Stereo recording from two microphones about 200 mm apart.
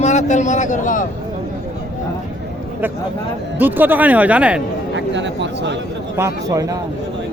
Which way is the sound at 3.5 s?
10° right (ahead or behind).